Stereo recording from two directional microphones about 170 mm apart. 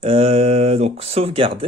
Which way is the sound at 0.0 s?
35° right (ahead or behind).